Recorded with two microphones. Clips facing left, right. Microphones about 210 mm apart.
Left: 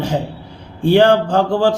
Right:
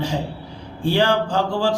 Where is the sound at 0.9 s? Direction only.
55° left (ahead or behind).